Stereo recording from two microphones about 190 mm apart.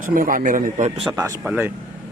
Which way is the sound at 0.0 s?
45° right (ahead or behind).